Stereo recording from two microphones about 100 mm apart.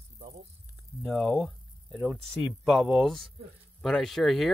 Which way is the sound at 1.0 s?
Centre (ahead or behind).